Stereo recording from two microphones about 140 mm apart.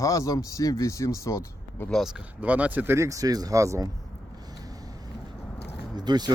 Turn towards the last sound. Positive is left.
turn(degrees=-30)  # may be behind; listen again after turning